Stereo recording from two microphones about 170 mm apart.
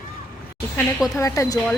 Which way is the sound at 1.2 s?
20° left (ahead or behind).